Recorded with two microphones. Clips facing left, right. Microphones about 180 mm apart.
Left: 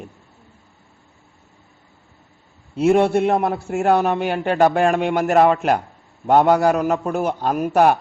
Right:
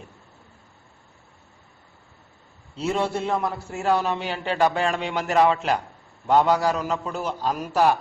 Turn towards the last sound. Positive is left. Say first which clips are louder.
# left 5 dB
turn(degrees=55)  # may be behind; listen again after turning